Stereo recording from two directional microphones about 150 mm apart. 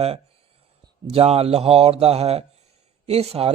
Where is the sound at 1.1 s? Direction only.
40° right (ahead or behind).